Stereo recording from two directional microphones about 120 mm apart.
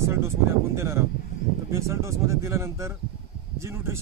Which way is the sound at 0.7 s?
25° right (ahead or behind).